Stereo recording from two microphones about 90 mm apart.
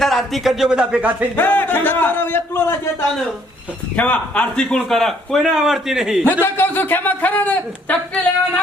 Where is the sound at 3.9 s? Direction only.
15° left (ahead or behind); by 6.2 s 5° right (ahead or behind).